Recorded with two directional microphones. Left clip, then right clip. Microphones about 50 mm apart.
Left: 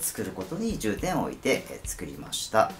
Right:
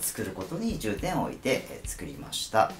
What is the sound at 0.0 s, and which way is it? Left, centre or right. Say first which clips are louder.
Speech: left 1 dB; centre.